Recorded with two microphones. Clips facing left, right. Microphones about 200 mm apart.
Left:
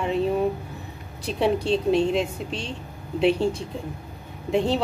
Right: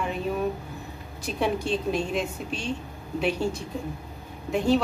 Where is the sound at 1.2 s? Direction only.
30° left (ahead or behind).